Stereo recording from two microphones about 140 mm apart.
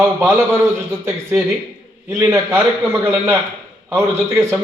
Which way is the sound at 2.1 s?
20° right (ahead or behind).